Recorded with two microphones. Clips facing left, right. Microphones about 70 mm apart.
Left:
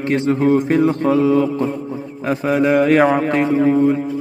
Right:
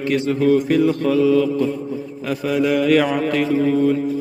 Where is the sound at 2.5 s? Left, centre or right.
Left.